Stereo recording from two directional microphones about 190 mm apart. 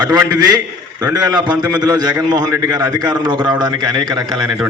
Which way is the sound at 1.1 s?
20° right (ahead or behind).